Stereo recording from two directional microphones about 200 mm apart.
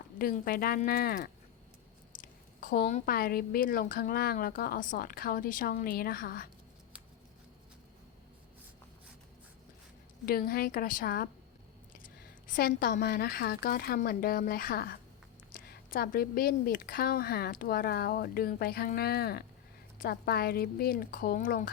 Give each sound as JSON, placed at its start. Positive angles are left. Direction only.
{"t": 0.2, "sound": "a woman's voice", "side_deg": 45}
{"t": 10.2, "sound": "a woman's voice", "side_deg": 50}
{"t": 12.5, "sound": "a woman's voice", "side_deg": 45}